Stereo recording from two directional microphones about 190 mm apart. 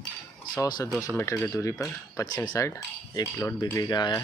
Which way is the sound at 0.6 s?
20° left (ahead or behind).